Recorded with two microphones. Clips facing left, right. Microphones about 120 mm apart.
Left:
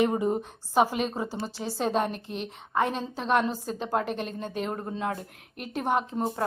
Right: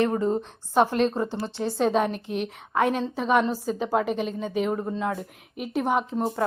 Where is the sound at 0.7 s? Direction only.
5° left (ahead or behind).